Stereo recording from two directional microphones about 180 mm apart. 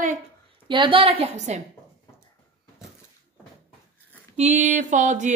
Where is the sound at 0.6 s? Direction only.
30° right (ahead or behind).